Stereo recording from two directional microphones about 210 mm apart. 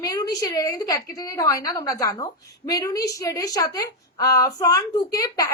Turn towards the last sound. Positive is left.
turn(degrees=15)  # may be behind; listen again after turning